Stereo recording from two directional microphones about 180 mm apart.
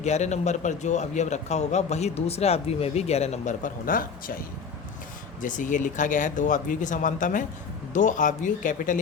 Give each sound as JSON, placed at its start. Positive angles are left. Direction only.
{"t": 0.0, "sound": "a man's voice", "side_deg": 40}